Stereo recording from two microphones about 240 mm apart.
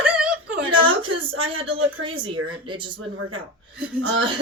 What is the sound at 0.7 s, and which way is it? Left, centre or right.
A woman's voice, right.